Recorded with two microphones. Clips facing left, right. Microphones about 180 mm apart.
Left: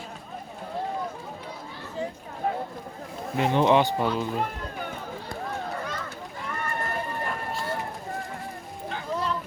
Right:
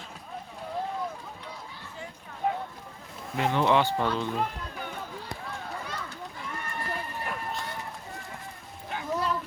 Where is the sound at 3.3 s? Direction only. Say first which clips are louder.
Left 3 dB; 20° left (ahead or behind).